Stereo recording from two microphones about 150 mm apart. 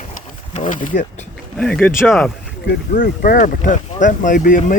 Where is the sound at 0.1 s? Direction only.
55° left (ahead or behind).